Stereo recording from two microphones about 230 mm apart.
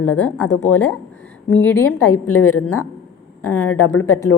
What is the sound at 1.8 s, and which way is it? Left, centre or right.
A woman's voice, left.